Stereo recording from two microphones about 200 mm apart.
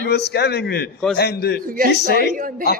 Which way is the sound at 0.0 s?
55° left (ahead or behind).